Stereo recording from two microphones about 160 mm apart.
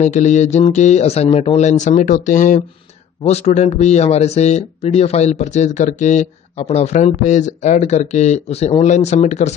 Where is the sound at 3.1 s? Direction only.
40° left (ahead or behind).